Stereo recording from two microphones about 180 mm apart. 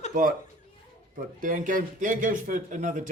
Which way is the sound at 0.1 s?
50° right (ahead or behind).